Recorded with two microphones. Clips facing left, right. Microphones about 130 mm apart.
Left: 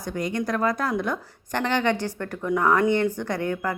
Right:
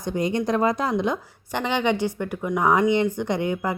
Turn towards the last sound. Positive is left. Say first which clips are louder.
# right 2 dB
turn(degrees=-15)  # may be behind; listen again after turning